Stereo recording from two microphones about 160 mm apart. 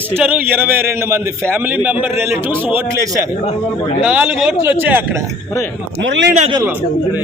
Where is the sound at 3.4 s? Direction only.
40° left (ahead or behind).